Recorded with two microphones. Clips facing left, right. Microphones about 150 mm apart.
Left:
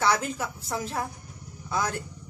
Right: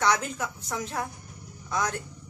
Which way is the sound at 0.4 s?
30° left (ahead or behind).